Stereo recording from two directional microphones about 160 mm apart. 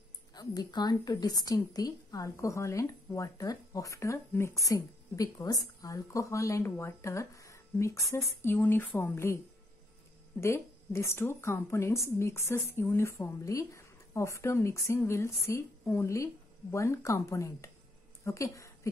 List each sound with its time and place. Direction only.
0.3 s a woman's voice: 25° left (ahead or behind)
10.4 s a woman's voice: 15° left (ahead or behind)